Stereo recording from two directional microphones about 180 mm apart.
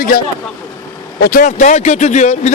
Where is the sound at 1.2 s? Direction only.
50° left (ahead or behind).